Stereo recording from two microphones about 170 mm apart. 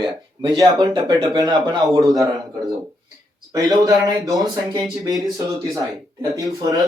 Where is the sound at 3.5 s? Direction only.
20° right (ahead or behind).